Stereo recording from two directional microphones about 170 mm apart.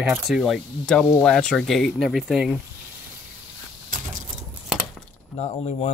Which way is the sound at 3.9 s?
50° right (ahead or behind).